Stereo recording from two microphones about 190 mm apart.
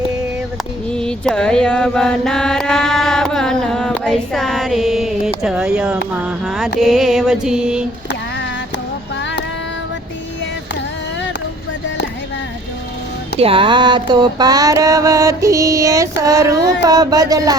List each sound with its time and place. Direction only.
0.9 s mantra: 5° left (ahead or behind)
13.4 s mantra: 30° right (ahead or behind)
16.8 s music: 20° right (ahead or behind)